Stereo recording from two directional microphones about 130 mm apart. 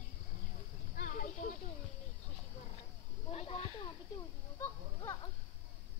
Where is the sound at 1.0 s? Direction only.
85° left.